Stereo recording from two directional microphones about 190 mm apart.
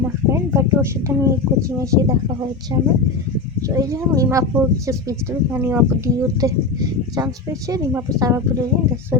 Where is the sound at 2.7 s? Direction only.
20° right (ahead or behind).